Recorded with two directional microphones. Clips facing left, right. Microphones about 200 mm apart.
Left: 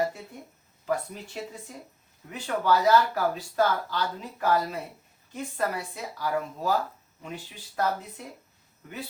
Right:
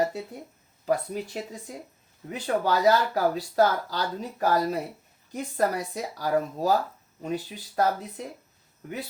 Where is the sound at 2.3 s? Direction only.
40° right (ahead or behind).